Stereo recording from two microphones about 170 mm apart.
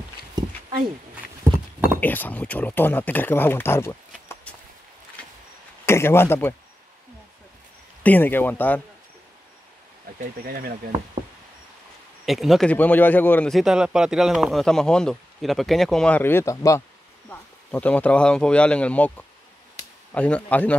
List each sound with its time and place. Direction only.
2.0 s speech: 10° left (ahead or behind)
4.5 s a sound: 10° left (ahead or behind)
5.2 s vehicle: 5° left (ahead or behind)
5.9 s speech: 15° left (ahead or behind)
8.0 s speech: 10° left (ahead or behind)
10.1 s speech: 60° right (ahead or behind)
12.3 s a man's voice: centre (ahead or behind)